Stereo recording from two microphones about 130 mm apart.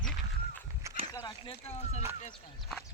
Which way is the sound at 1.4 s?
55° left (ahead or behind).